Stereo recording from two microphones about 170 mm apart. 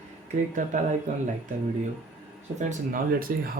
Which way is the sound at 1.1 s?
45° right (ahead or behind).